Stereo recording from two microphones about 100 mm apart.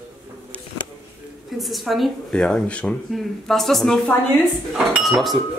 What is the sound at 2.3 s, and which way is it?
Speech, 10° left (ahead or behind).